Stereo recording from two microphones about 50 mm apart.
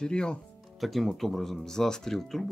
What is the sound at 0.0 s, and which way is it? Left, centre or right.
Speech, centre.